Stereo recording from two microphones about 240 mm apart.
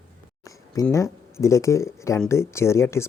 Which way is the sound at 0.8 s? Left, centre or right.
Centre.